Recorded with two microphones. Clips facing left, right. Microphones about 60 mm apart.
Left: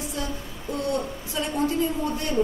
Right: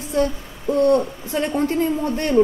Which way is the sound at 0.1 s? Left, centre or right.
Right.